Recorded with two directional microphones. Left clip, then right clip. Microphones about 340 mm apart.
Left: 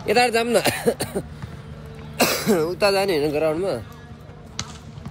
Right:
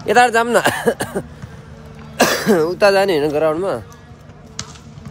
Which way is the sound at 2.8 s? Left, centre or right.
Centre.